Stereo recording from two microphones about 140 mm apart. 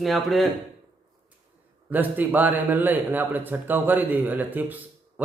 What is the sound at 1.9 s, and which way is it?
A man's voice, 10° right (ahead or behind).